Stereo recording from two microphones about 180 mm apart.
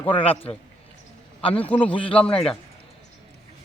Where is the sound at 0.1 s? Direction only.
30° left (ahead or behind).